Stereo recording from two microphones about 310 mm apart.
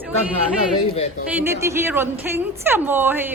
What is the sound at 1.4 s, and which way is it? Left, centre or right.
A woman's voice, centre.